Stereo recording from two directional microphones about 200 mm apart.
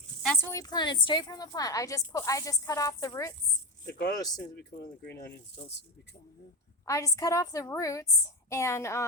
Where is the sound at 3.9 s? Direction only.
50° left (ahead or behind).